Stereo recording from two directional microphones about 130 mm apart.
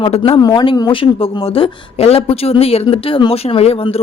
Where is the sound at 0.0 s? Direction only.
45° left (ahead or behind).